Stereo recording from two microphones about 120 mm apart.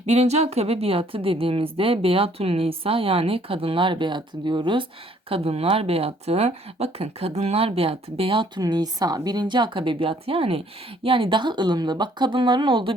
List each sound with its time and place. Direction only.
0.0 s speech: 65° right (ahead or behind); by 4.9 s 40° right (ahead or behind)
5.3 s speech: 55° right (ahead or behind)